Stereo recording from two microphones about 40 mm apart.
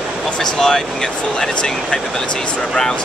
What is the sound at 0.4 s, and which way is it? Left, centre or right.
Speech, centre.